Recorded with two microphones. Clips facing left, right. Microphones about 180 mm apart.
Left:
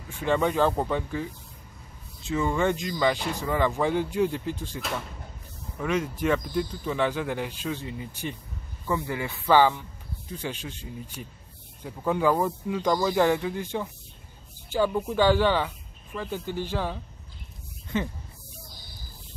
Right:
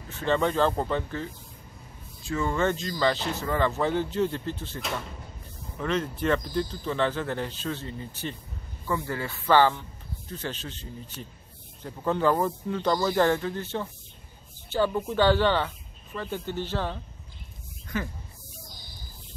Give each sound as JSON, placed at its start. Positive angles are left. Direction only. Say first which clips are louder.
{"t": 0.1, "sound": "speech", "louder": "left 1 dB", "side_deg": 10}
{"t": 17.9, "sound": "speech", "louder": "left 3 dB", "side_deg": 20}